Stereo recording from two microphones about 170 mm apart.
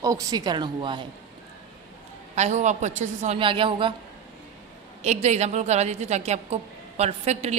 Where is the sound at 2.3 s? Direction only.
45° right (ahead or behind).